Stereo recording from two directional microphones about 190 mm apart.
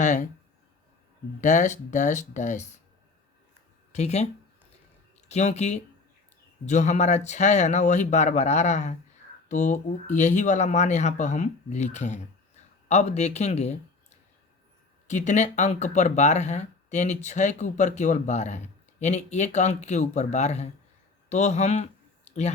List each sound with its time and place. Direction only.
0.0 s speech: 40° left (ahead or behind)
1.4 s speech: 40° left (ahead or behind)
3.9 s speech: 35° left (ahead or behind)
5.3 s speech: 35° left (ahead or behind)
21.2 s a sound: 35° left (ahead or behind)